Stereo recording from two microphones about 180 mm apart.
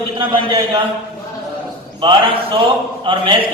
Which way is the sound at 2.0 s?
30° right (ahead or behind).